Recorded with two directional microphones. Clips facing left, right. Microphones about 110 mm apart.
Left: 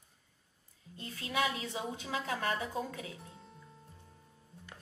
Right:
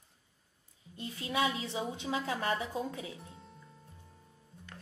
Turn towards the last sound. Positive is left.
turn(degrees=0)  # may be behind; listen again after turning